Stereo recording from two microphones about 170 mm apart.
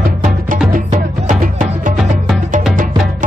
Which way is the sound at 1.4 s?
50° right (ahead or behind).